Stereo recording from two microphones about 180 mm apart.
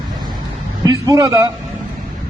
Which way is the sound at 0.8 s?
20° right (ahead or behind).